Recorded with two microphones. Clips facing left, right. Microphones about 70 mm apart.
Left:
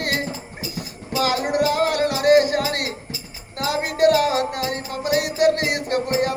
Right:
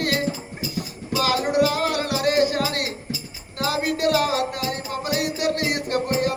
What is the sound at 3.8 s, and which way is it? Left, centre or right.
Music, left.